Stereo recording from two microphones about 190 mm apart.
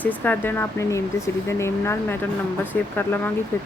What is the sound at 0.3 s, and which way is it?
Speech, 10° left (ahead or behind).